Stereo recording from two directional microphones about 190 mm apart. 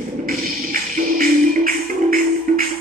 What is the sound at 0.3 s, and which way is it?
Music, 50° right (ahead or behind).